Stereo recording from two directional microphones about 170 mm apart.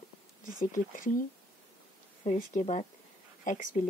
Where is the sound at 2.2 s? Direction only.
50° left (ahead or behind).